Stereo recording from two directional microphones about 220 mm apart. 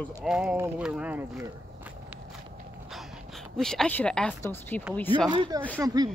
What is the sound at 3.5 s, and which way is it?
A woman's voice, 5° left (ahead or behind).